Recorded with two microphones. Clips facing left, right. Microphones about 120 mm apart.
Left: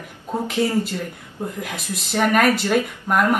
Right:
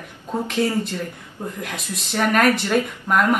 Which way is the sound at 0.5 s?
15° left (ahead or behind).